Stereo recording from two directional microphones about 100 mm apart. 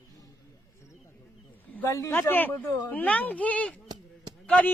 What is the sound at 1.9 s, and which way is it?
Speech, 35° left (ahead or behind).